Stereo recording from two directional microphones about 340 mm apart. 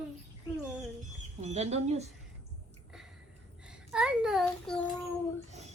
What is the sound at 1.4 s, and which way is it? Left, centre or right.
Speech, centre.